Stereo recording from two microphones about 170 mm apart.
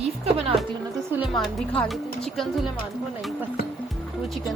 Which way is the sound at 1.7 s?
5° left (ahead or behind).